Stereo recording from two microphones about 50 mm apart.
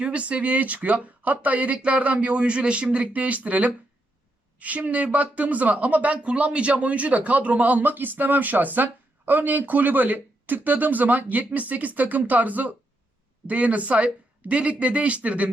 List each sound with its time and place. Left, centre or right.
0.0 s speech: right